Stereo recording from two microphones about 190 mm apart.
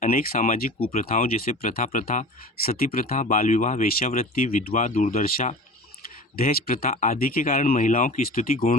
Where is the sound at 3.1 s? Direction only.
40° left (ahead or behind).